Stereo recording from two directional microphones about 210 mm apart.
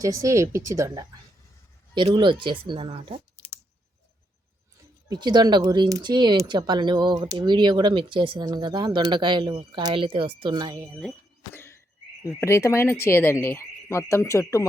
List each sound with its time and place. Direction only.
0.0 s speech: 15° right (ahead or behind)
5.0 s speech: 20° right (ahead or behind)
12.2 s speech: 15° left (ahead or behind)